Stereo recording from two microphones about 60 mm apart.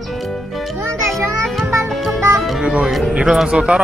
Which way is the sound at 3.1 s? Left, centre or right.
Centre.